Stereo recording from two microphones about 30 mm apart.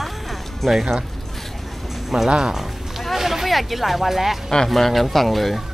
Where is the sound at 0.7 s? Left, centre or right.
Centre.